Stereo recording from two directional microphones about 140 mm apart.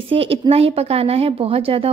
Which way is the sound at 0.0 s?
40° right (ahead or behind).